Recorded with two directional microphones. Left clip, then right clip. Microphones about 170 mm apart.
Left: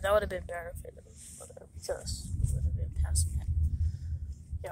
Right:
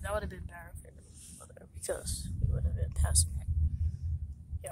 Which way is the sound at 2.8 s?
40° right (ahead or behind).